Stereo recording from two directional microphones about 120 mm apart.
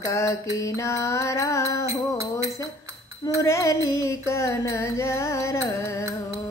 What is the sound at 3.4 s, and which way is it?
Music, 25° left (ahead or behind).